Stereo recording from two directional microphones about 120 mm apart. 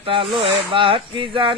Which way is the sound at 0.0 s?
45° right (ahead or behind).